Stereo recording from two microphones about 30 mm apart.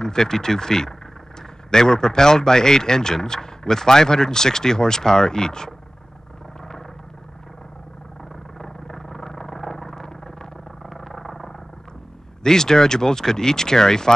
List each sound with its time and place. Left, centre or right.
0.0 s speech: left
8.5 s vehicle: centre
11.2 s effects unit: centre
12.4 s speech: centre